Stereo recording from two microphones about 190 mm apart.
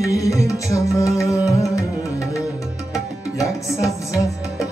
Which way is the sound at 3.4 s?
15° left (ahead or behind).